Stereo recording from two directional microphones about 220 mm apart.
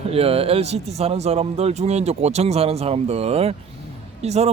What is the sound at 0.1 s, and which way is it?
A man's voice, 25° right (ahead or behind).